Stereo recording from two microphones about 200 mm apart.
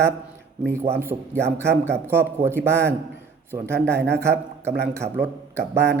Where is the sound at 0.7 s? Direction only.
10° right (ahead or behind).